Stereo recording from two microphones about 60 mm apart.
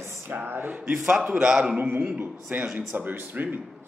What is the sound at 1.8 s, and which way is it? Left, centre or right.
A man's voice, right.